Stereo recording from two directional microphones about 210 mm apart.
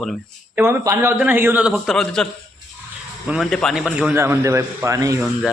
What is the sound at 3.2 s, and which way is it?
A man's voice, centre (ahead or behind).